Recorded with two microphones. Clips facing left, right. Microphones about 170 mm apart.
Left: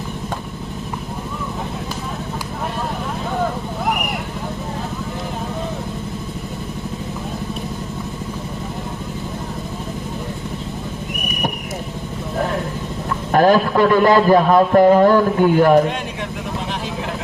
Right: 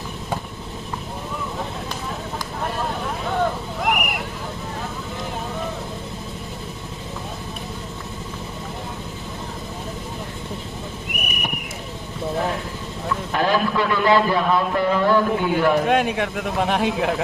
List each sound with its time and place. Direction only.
13.3 s a man's voice: 45° left (ahead or behind)
15.9 s speech: 60° right (ahead or behind)